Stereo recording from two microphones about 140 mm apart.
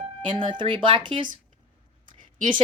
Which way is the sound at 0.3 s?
35° right (ahead or behind).